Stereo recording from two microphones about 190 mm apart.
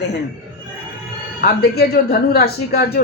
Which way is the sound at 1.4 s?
55° left (ahead or behind).